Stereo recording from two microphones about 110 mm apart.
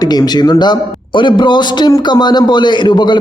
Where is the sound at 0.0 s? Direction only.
40° left (ahead or behind).